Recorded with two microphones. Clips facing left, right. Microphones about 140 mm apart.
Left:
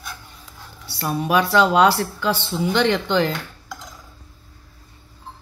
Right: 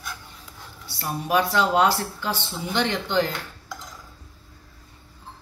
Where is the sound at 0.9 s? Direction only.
90° left.